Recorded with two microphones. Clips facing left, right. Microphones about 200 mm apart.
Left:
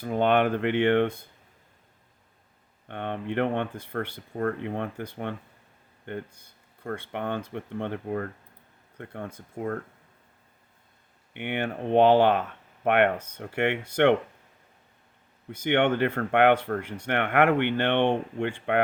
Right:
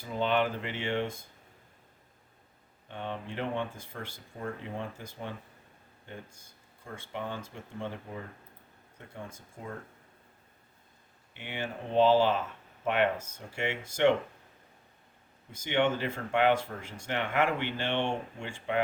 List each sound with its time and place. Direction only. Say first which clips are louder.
0.0 s speech: left 6 dB; 55° left (ahead or behind)
2.9 s speech: left 7 dB; 60° left (ahead or behind)
11.3 s speech: left 8 dB; 60° left (ahead or behind)
15.5 s speech: left 5 dB; 60° left (ahead or behind)